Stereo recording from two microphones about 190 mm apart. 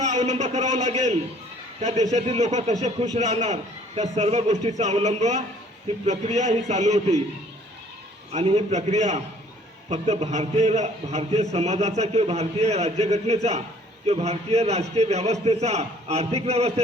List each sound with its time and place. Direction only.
0.0 s a man's voice: 35° right (ahead or behind)
8.3 s a man's voice: 35° right (ahead or behind)